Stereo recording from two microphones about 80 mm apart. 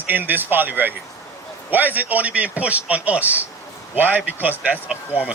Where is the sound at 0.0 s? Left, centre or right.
Right.